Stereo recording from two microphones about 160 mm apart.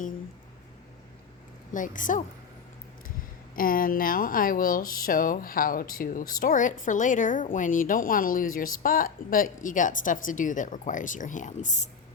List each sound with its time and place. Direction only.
1.7 s a woman's voice: 55° left (ahead or behind)
3.5 s a woman's voice: 60° left (ahead or behind)